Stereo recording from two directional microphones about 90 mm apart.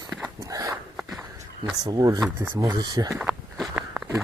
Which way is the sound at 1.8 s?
45° right (ahead or behind).